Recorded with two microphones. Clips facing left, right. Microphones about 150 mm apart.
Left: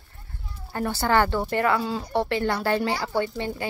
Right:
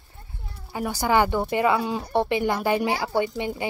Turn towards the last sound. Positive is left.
turn(degrees=-15)  # may be behind; listen again after turning